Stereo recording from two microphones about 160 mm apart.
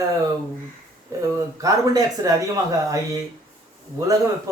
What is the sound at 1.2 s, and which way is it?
Speech, 20° right (ahead or behind).